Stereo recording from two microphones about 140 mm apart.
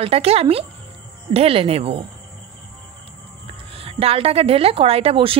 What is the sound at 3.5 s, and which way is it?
A woman's voice, 40° right (ahead or behind).